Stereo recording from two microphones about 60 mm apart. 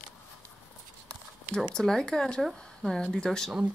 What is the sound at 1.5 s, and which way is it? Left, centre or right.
Speech, centre.